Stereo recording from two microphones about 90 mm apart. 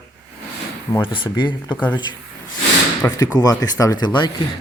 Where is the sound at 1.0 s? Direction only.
70° left (ahead or behind).